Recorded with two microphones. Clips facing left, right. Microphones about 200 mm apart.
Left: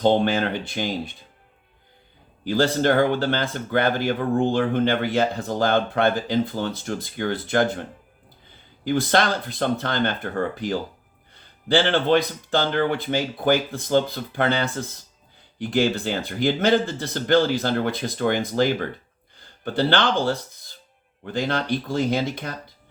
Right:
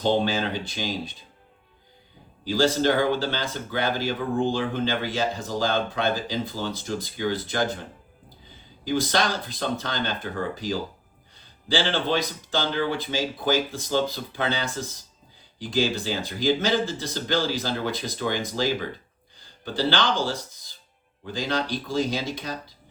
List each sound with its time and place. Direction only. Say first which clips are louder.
0.0 s speech: left 4 dB; 55° left (ahead or behind)
2.4 s speech: left 1 dB; 55° left (ahead or behind)